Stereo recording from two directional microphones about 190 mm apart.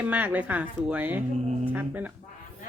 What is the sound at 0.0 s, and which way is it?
A woman's voice, 10° right (ahead or behind).